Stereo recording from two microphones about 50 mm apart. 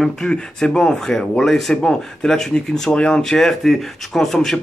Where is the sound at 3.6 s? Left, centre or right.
Centre.